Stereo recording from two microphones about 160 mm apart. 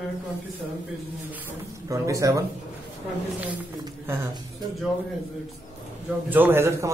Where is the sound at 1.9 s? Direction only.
20° right (ahead or behind).